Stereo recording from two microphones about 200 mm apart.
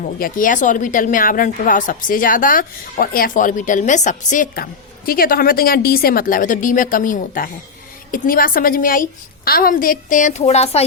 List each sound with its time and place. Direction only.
0.0 s speech: 45° left (ahead or behind)